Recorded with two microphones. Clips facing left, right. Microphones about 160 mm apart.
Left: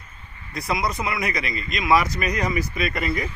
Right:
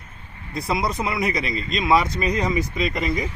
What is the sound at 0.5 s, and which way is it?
Speech, 30° right (ahead or behind).